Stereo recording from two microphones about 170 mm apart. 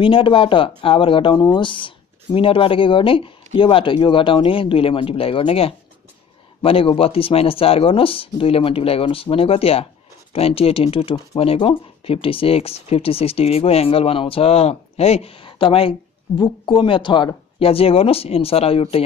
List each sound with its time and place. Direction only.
0.0 s speech: 30° left (ahead or behind)